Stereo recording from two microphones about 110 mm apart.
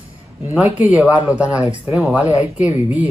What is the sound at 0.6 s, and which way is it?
Speech, 15° right (ahead or behind).